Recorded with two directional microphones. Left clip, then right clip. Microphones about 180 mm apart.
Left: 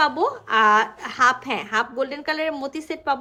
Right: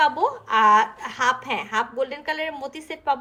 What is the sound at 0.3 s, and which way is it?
A woman's voice, 35° left (ahead or behind).